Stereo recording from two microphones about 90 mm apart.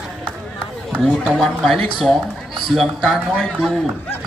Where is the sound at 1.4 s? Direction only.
5° left (ahead or behind).